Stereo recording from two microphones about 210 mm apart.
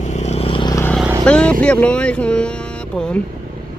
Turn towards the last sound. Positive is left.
turn(degrees=5)  # may be behind; listen again after turning